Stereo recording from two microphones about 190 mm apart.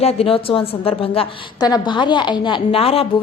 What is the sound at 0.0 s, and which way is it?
A woman's voice, 30° left (ahead or behind).